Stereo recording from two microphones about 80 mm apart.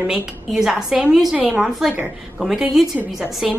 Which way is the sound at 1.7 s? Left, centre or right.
Centre.